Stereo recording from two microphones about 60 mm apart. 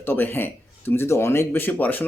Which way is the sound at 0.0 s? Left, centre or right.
Left.